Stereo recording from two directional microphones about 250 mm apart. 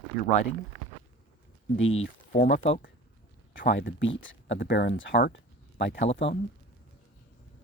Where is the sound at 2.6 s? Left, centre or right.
Left.